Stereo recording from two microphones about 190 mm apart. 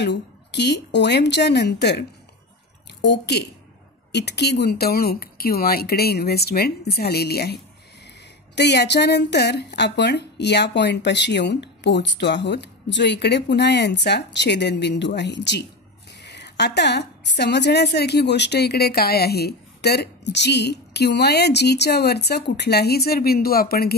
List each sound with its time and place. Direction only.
0.0 s a woman's voice: 65° left (ahead or behind)
8.5 s a woman's voice: 60° left (ahead or behind)